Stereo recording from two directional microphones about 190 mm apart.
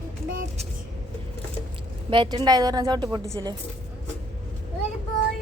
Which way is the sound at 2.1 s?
25° right (ahead or behind).